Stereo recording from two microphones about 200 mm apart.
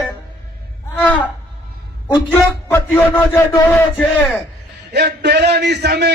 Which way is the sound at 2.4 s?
10° left (ahead or behind).